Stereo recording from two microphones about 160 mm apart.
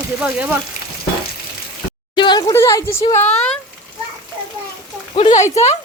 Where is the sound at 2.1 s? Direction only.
25° left (ahead or behind).